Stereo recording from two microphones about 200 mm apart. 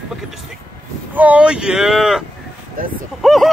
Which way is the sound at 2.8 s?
45° right (ahead or behind).